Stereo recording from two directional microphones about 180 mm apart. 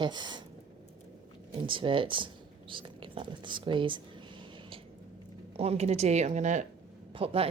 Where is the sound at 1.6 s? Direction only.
30° right (ahead or behind).